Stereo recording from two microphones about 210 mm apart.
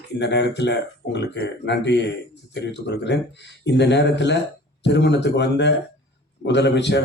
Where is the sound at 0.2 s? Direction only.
55° left (ahead or behind).